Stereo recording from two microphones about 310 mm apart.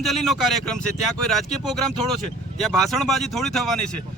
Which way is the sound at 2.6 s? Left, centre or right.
Centre.